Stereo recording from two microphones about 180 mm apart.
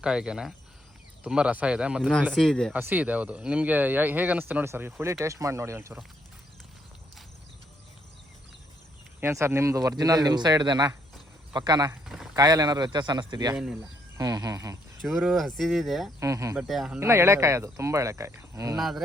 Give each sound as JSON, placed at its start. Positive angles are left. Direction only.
{"t": 0.0, "sound": "speech", "side_deg": -5}
{"t": 2.7, "sound": "speech", "side_deg": -10}
{"t": 9.2, "sound": "a man's voice", "side_deg": -15}
{"t": 12.0, "sound": "a sound", "side_deg": -5}
{"t": 12.4, "sound": "a man's voice", "side_deg": -20}
{"t": 15.0, "sound": "speech", "side_deg": -5}
{"t": 16.2, "sound": "speech", "side_deg": -15}
{"t": 16.6, "sound": "speech", "side_deg": 0}
{"t": 17.0, "sound": "speech", "side_deg": -15}
{"t": 18.8, "sound": "speech", "side_deg": 0}